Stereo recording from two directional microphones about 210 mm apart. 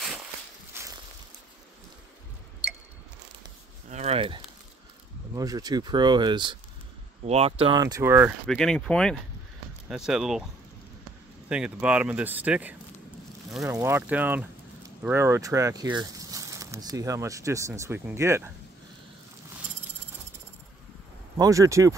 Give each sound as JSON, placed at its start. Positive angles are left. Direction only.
{"t": 0.7, "sound": "boat", "side_deg": -10}
{"t": 3.9, "sound": "speech", "side_deg": -30}
{"t": 8.5, "sound": "speech", "side_deg": 0}
{"t": 11.4, "sound": "speech", "side_deg": -5}
{"t": 21.4, "sound": "speech", "side_deg": -15}